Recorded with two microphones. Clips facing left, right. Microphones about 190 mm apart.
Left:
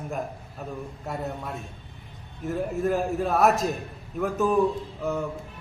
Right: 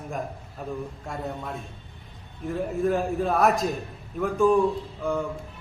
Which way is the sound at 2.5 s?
5° left (ahead or behind).